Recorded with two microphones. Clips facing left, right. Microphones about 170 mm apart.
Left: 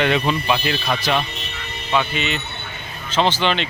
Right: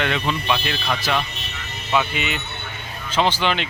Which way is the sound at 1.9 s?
10° right (ahead or behind).